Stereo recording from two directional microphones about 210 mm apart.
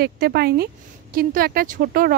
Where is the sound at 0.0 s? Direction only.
50° right (ahead or behind).